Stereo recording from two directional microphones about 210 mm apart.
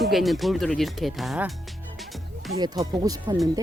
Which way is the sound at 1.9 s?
Centre (ahead or behind).